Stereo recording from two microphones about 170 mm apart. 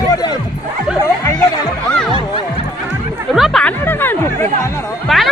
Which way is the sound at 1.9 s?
5° left (ahead or behind).